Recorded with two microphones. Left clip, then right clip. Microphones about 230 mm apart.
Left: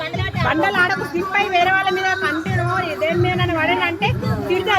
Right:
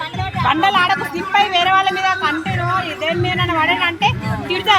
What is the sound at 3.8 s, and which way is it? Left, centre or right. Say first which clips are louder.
Music: right 3 dB; right.